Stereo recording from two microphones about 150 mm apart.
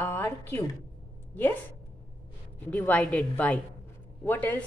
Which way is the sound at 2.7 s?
10° left (ahead or behind).